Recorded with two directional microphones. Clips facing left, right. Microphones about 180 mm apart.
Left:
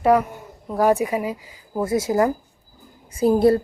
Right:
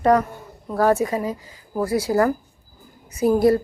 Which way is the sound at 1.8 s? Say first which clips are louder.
Even; 25° left (ahead or behind).